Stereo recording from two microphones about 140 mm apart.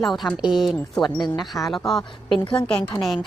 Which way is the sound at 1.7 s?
Centre (ahead or behind).